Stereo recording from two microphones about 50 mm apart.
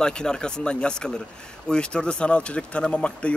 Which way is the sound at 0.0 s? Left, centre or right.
Centre.